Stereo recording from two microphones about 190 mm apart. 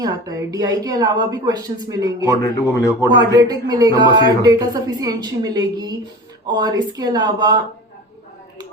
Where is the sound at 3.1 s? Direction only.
20° right (ahead or behind).